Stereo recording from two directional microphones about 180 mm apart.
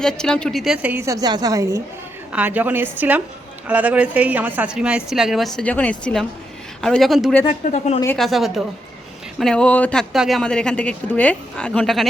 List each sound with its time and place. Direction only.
0.0 s a woman's voice: 5° left (ahead or behind); by 1.8 s 20° right (ahead or behind)
2.3 s a woman's voice: 10° right (ahead or behind)
7.7 s speech: 40° left (ahead or behind)
8.0 s speech: 5° left (ahead or behind)